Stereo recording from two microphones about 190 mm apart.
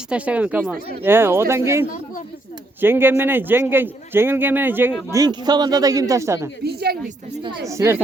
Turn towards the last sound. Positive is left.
turn(degrees=-15)  # may be behind; listen again after turning